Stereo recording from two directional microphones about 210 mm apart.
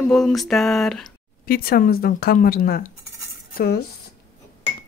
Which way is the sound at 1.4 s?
45° left (ahead or behind).